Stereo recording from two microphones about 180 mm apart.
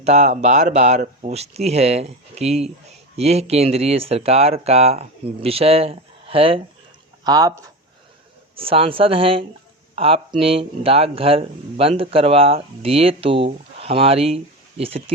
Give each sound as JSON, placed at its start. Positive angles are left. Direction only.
{"t": 0.0, "sound": "speech", "side_deg": -40}
{"t": 7.3, "sound": "speech", "side_deg": -20}
{"t": 8.5, "sound": "speech", "side_deg": -30}